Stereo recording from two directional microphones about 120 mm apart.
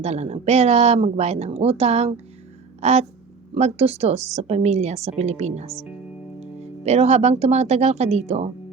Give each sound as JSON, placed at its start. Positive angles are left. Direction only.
{"t": 0.0, "sound": "a woman's voice", "side_deg": -65}